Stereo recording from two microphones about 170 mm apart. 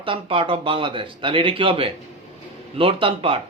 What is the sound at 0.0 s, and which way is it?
Speech, 30° right (ahead or behind).